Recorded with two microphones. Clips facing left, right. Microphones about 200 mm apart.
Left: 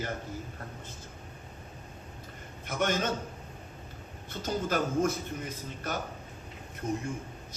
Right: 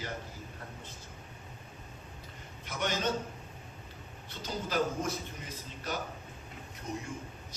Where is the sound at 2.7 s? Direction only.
50° left (ahead or behind).